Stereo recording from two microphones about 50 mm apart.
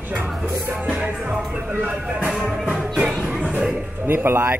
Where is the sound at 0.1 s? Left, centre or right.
Right.